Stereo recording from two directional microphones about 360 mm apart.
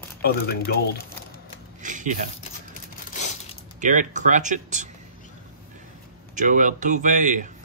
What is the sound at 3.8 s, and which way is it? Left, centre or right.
Speech, right.